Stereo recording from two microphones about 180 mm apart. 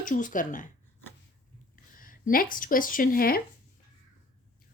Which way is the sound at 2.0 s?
50° left (ahead or behind).